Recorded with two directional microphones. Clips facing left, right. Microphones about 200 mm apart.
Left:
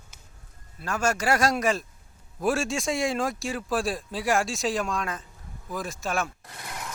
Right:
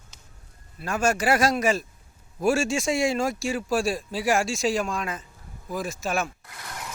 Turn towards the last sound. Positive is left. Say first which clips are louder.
# right 2 dB
turn(degrees=0)  # may be behind; listen again after turning